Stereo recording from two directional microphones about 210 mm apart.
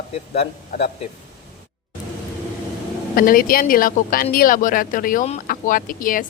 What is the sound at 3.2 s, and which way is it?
Speech, 45° left (ahead or behind).